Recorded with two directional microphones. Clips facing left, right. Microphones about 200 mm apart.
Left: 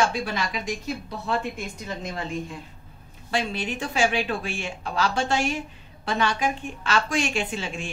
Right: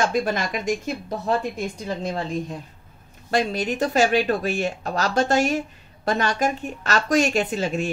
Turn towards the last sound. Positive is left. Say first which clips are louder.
# right 6 dB
turn(degrees=-40)  # may be behind; listen again after turning